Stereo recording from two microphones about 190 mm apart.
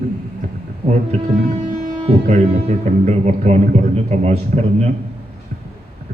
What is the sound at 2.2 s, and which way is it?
Speech, 35° right (ahead or behind).